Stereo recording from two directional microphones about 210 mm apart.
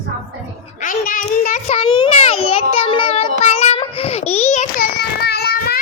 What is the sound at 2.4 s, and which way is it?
Child singing, 25° left (ahead or behind).